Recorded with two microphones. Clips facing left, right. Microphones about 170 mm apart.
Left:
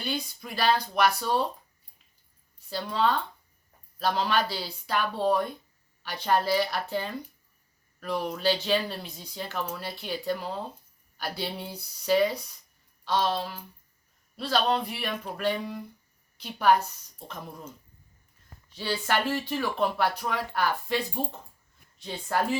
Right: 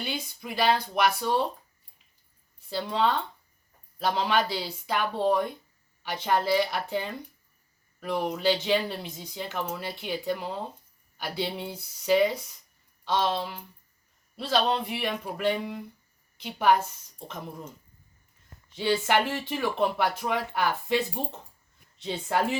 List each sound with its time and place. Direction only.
0.0 s speech: 20° right (ahead or behind)
2.6 s speech: 20° right (ahead or behind)
18.7 s speech: 20° right (ahead or behind)